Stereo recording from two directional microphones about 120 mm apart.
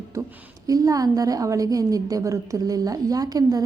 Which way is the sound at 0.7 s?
30° right (ahead or behind).